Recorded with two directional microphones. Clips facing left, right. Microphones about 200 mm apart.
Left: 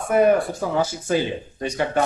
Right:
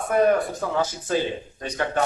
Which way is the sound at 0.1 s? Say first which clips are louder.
Left 3 dB; 10° left (ahead or behind).